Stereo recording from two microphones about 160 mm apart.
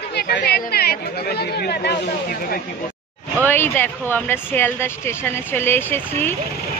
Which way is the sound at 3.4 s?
15° left (ahead or behind).